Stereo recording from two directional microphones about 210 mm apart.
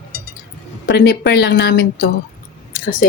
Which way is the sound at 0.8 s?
50° left (ahead or behind).